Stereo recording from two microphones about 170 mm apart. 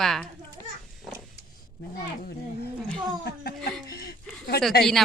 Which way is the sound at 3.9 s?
65° left (ahead or behind).